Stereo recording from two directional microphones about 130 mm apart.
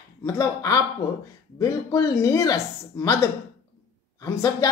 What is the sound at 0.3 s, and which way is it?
Speech, 25° left (ahead or behind).